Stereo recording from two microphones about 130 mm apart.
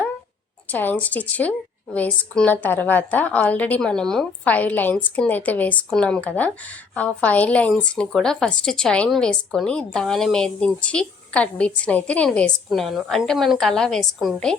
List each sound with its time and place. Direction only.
0.7 s a woman's voice: 15° left (ahead or behind)